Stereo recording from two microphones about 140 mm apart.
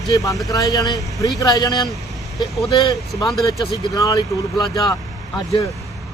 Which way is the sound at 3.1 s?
Centre (ahead or behind).